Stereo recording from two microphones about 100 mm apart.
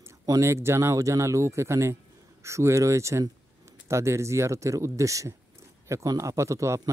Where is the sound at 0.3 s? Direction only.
30° right (ahead or behind).